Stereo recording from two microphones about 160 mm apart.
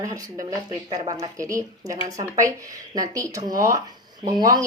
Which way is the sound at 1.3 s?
20° right (ahead or behind).